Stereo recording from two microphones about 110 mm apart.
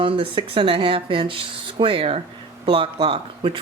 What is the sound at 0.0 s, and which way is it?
Speech, 55° right (ahead or behind).